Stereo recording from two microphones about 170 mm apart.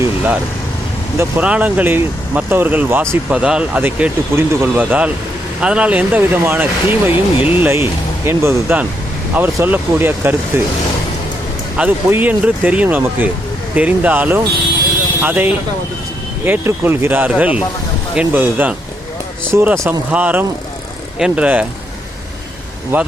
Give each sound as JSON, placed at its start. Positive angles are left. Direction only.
{"t": 1.2, "sound": "speech", "side_deg": -10}
{"t": 7.1, "sound": "speech", "side_deg": 30}
{"t": 7.5, "sound": "speech", "side_deg": -10}
{"t": 11.8, "sound": "speech", "side_deg": -10}
{"t": 22.9, "sound": "speech", "side_deg": -10}